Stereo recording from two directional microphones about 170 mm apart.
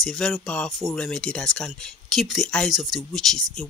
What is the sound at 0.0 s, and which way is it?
Speech, centre (ahead or behind).